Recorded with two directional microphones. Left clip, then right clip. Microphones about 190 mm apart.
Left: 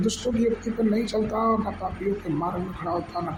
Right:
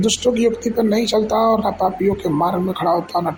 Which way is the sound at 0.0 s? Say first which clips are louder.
Right 9 dB; 30° right (ahead or behind).